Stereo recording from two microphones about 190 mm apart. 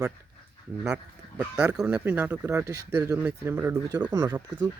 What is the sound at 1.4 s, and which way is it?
Speech, 5° right (ahead or behind).